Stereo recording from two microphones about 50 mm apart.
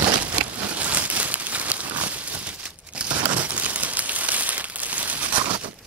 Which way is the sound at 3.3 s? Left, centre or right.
Right.